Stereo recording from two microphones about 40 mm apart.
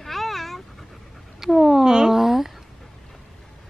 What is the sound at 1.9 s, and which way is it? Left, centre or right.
Speech, centre.